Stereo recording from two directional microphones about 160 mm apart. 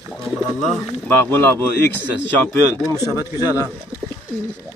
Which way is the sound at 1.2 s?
15° left (ahead or behind).